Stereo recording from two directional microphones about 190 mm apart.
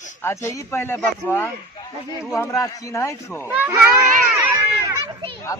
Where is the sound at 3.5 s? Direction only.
10° right (ahead or behind).